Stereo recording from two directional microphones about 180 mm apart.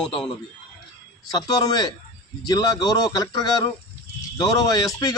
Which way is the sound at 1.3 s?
20° left (ahead or behind).